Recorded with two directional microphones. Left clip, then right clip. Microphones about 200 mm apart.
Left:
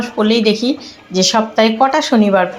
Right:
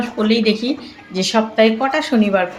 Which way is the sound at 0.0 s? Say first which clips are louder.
Left 3 dB; 10° left (ahead or behind).